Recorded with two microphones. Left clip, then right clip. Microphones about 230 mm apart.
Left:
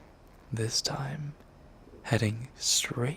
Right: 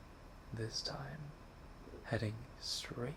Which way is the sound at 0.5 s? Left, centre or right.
Left.